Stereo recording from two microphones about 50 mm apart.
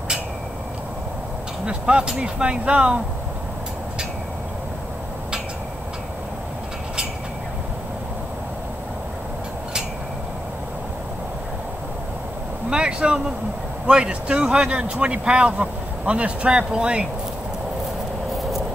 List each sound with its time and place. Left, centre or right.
1.7 s speech: centre
12.6 s speech: centre